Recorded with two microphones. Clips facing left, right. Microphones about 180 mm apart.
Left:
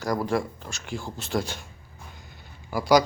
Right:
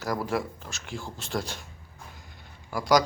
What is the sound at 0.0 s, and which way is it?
Speech, 5° right (ahead or behind).